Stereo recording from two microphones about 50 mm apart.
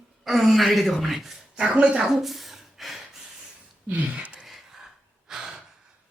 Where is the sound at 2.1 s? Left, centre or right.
Centre.